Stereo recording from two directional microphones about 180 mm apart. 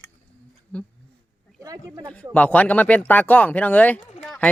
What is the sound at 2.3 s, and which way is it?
Speech, 10° left (ahead or behind).